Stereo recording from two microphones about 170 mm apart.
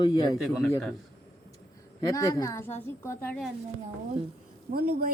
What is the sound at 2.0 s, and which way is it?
Speech, 20° left (ahead or behind).